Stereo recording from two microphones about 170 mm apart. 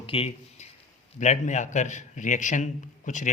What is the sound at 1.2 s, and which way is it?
Speech, 45° left (ahead or behind).